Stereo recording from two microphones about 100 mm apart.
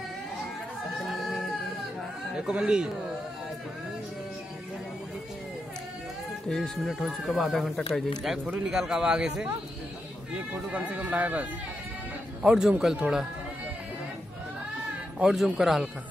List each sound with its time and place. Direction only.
1.0 s singing: centre (ahead or behind)
2.3 s speech: 5° right (ahead or behind)
6.5 s speech: centre (ahead or behind)
15.1 s speech: 5° right (ahead or behind)